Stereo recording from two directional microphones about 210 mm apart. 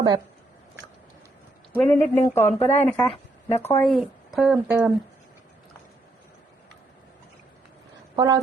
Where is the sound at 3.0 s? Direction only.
30° left (ahead or behind).